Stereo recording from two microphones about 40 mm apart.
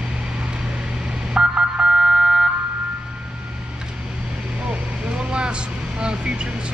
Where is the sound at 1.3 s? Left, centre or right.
Right.